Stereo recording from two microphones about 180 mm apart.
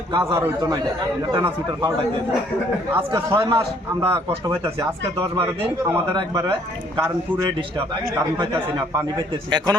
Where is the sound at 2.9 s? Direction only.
15° right (ahead or behind).